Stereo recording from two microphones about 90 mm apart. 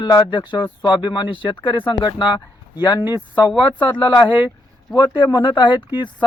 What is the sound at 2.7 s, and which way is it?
Speech, 50° left (ahead or behind).